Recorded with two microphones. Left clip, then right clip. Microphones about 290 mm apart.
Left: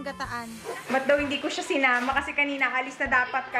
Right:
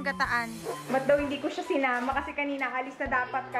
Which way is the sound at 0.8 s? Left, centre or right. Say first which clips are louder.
Left 2 dB; centre.